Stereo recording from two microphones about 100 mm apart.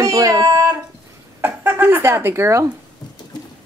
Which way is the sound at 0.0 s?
35° right (ahead or behind).